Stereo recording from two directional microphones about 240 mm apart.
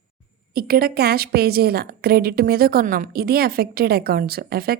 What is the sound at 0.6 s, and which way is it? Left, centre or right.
A woman's voice, right.